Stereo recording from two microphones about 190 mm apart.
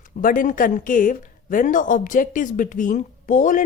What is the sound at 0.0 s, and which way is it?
A woman's voice, 45° left (ahead or behind).